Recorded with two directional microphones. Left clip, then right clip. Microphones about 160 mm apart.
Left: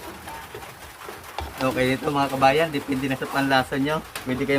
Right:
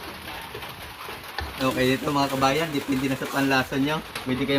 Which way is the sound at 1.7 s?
Centre (ahead or behind).